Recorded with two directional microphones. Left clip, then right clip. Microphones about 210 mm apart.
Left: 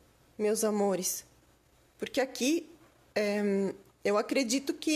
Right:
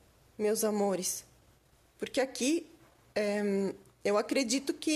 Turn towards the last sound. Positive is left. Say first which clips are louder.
# left 1 dB
turn(degrees=0)  # may be behind; listen again after turning